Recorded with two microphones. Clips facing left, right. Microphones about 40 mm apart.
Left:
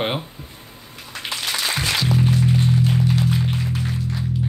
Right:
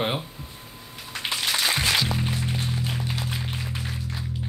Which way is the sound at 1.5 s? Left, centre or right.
Centre.